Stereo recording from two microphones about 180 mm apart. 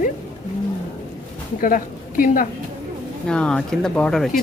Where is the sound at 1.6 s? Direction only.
50° left (ahead or behind).